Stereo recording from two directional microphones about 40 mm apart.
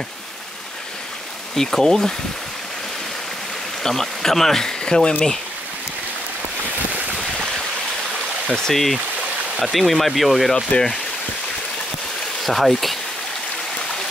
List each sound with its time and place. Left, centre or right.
1.7 s speech: centre
3.8 s speech: centre
8.6 s speech: centre
10.7 s speech: left
12.4 s speech: centre